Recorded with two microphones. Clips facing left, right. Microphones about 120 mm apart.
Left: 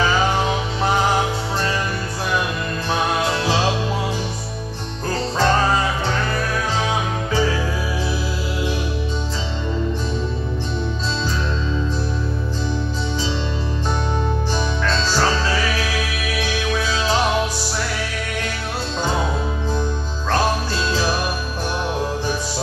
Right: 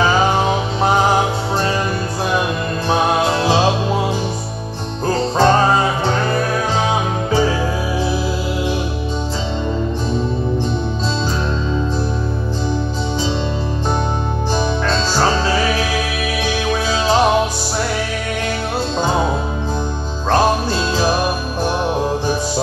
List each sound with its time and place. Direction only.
0.0 s music: 25° right (ahead or behind)
2.9 s music: 25° right (ahead or behind)
14.5 s music: 25° right (ahead or behind)
18.9 s music: 25° right (ahead or behind)